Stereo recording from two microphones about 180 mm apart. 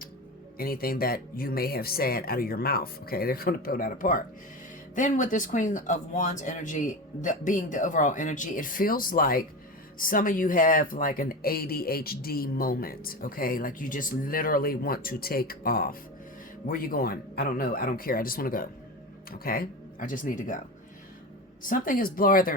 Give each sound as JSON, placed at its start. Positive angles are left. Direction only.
{"t": 0.6, "sound": "speech", "side_deg": 55}
{"t": 21.6, "sound": "speech", "side_deg": 50}